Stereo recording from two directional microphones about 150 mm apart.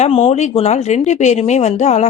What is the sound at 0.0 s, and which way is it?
A woman's voice, 40° left (ahead or behind).